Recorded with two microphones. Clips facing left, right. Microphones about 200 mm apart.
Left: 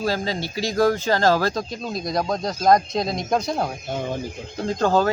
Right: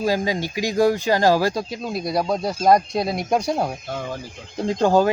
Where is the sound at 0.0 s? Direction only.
15° right (ahead or behind).